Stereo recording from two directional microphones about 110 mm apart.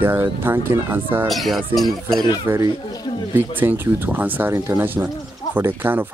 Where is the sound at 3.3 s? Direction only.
20° right (ahead or behind).